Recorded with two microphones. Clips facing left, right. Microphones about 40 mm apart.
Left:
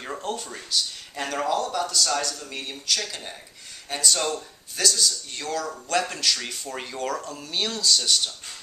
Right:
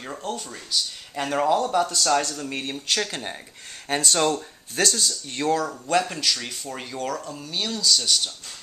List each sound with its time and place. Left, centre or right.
0.0 s speech: centre
1.2 s speech: centre
2.2 s speech: right
5.7 s speech: centre